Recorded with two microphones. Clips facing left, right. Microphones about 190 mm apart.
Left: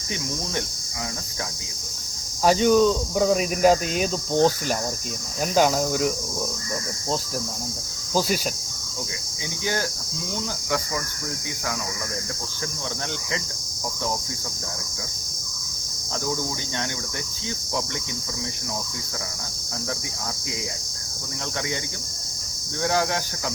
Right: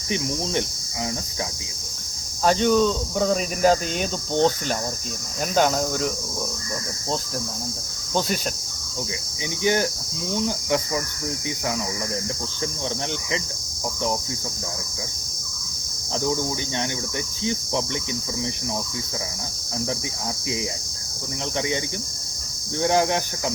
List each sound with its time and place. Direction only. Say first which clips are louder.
2.4 s speech: left 1 dB; 5° left (ahead or behind)
5.4 s cricket: left 1 dB; 5° left (ahead or behind)
9.6 s insect: right 6 dB; 20° right (ahead or behind)
22.8 s insect: right 3 dB; 20° right (ahead or behind)